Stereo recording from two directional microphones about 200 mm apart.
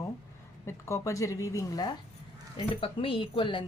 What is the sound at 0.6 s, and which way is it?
A woman's voice, 15° left (ahead or behind).